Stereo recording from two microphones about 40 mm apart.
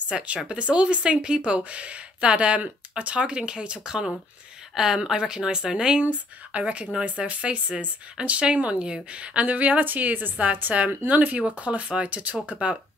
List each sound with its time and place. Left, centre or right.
0.1 s speech: right
5.9 s a woman's voice: right